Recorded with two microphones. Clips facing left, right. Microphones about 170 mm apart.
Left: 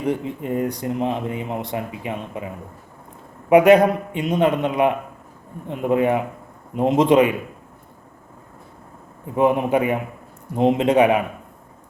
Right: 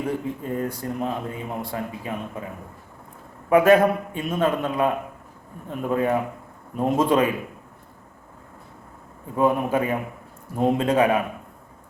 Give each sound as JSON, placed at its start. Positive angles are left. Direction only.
{"t": 0.0, "sound": "a man's voice", "side_deg": 20}
{"t": 3.5, "sound": "a man's voice", "side_deg": 20}
{"t": 9.3, "sound": "a man's voice", "side_deg": 20}